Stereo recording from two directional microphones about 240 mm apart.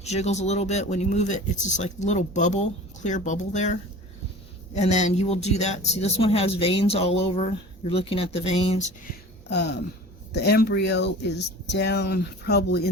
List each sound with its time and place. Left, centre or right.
0.0 s speech: left
9.5 s speech: left